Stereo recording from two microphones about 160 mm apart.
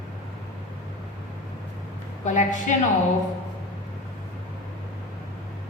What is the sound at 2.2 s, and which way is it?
Speech, 50° left (ahead or behind).